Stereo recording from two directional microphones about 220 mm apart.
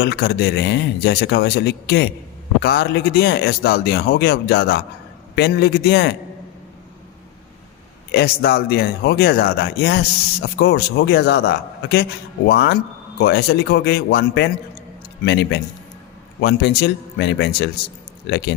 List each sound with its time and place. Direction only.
0.0 s speech: 45° left (ahead or behind)
8.1 s speech: 45° left (ahead or behind)